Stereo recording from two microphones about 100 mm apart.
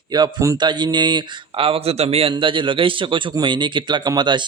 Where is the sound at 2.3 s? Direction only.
55° right (ahead or behind).